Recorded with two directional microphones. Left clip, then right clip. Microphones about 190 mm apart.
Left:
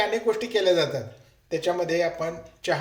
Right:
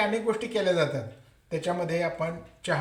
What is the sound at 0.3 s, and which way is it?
Speech, 50° left (ahead or behind).